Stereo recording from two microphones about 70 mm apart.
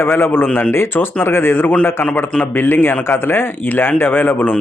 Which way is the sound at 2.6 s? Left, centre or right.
Left.